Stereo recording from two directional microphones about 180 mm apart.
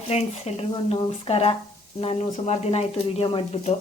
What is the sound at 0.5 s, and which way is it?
Speech, 35° left (ahead or behind).